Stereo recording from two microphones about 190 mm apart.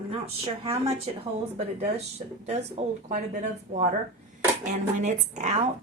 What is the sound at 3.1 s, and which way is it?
A woman's voice, 40° right (ahead or behind).